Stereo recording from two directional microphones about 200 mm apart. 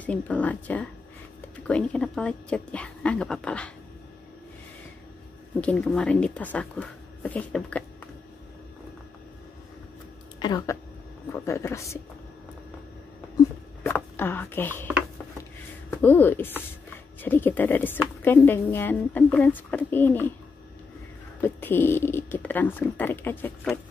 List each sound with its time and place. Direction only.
0.0 s a woman's voice: 5° left (ahead or behind)
5.6 s a woman's voice: 5° left (ahead or behind)
10.4 s speech: 20° left (ahead or behind)
13.8 s speech: 10° left (ahead or behind)
16.0 s speech: 10° left (ahead or behind)
21.4 s speech: 10° left (ahead or behind)